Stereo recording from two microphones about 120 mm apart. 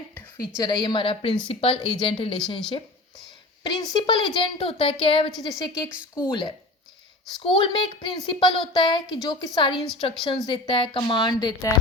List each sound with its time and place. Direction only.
0.3 s a woman's voice: 35° left (ahead or behind)
3.6 s a woman's voice: 40° left (ahead or behind)
4.4 s speech: 50° left (ahead or behind)
5.4 s a woman's voice: 35° left (ahead or behind)
9.7 s a woman's voice: centre (ahead or behind)
10.2 s a woman's voice: 40° left (ahead or behind)
10.7 s speech: 50° left (ahead or behind)
11.1 s a woman's voice: 35° left (ahead or behind)